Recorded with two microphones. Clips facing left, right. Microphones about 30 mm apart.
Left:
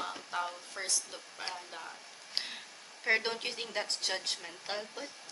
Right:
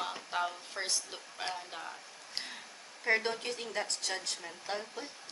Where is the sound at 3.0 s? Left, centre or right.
Left.